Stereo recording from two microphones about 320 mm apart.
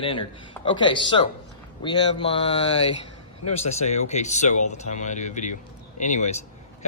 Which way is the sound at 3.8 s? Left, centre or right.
Left.